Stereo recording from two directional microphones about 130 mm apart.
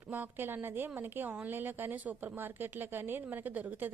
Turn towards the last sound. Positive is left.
turn(degrees=-15)  # may be behind; listen again after turning